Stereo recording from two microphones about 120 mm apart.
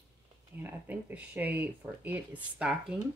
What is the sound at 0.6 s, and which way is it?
Speech, 15° right (ahead or behind).